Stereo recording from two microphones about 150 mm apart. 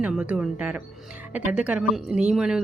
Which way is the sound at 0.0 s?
5° right (ahead or behind).